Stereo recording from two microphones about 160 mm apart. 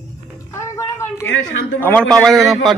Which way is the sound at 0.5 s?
15° left (ahead or behind).